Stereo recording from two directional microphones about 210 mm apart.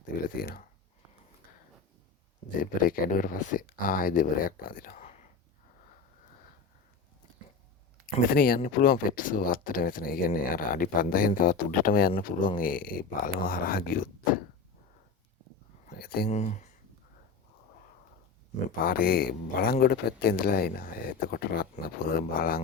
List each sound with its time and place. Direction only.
0.3 s speech: 45° left (ahead or behind)
2.6 s speech: 40° left (ahead or behind)
8.3 s speech: 45° left (ahead or behind)
15.9 s a sound: 45° left (ahead or behind)
16.3 s speech: 30° left (ahead or behind)
18.8 s speech: 45° left (ahead or behind)